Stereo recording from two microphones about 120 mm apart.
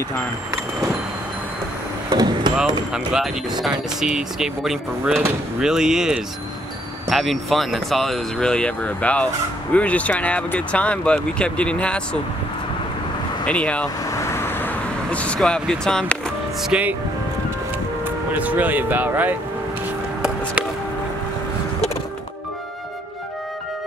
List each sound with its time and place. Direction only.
2.0 s a sound: 35° right (ahead or behind)
2.9 s speech: 5° right (ahead or behind)
13.5 s speech: 10° left (ahead or behind)
14.1 s vehicle: 25° left (ahead or behind); by 16.2 s 5° left (ahead or behind)
16.6 s speech: 10° right (ahead or behind)
18.0 s speech: 15° right (ahead or behind)